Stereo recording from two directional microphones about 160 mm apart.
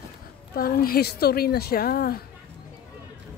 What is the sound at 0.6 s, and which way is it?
A woman's voice, 70° left (ahead or behind).